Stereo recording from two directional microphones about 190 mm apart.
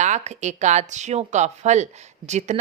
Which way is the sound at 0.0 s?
40° right (ahead or behind).